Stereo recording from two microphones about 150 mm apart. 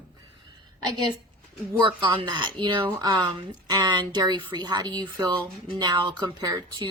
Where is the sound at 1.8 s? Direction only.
35° right (ahead or behind).